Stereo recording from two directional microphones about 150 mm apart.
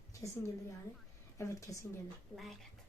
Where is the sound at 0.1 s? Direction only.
20° left (ahead or behind).